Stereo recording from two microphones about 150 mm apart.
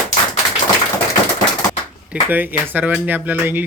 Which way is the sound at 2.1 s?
10° right (ahead or behind).